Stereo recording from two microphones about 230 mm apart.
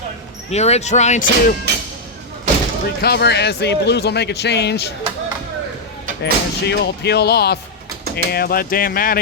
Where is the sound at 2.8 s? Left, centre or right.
Left.